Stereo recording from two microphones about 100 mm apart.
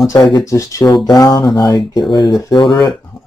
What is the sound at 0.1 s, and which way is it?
Speech, 45° left (ahead or behind).